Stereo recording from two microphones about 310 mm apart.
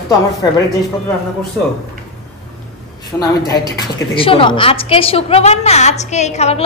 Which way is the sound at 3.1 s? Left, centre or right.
Centre.